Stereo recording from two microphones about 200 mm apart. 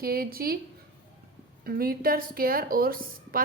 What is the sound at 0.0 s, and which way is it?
Speech, 50° right (ahead or behind).